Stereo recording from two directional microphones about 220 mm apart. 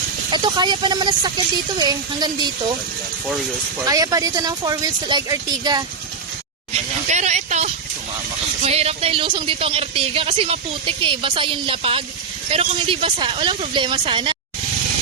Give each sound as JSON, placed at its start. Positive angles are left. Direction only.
{"t": 0.3, "sound": "speech", "side_deg": -20}
{"t": 3.8, "sound": "speech", "side_deg": -15}
{"t": 6.7, "sound": "speech", "side_deg": -30}